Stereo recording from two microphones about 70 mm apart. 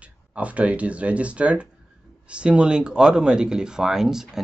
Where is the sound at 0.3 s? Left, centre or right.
Centre.